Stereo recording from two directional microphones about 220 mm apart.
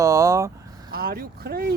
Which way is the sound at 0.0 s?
15° right (ahead or behind).